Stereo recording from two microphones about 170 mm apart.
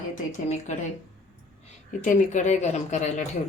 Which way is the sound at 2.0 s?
50° left (ahead or behind).